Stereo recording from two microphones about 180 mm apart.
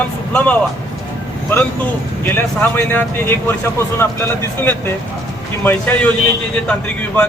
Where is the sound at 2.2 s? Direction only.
15° left (ahead or behind).